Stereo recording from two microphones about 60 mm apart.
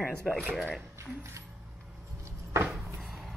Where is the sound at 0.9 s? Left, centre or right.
Right.